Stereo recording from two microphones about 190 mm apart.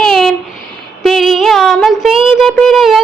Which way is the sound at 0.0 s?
Centre (ahead or behind).